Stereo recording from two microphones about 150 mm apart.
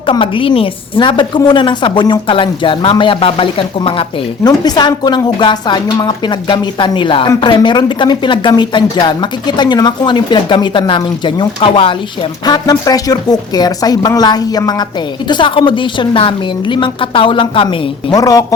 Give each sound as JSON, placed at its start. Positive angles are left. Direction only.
{"t": 0.0, "sound": "a woman's voice", "side_deg": 35}
{"t": 4.4, "sound": "a woman's voice", "side_deg": 25}
{"t": 18.2, "sound": "a woman's voice", "side_deg": 25}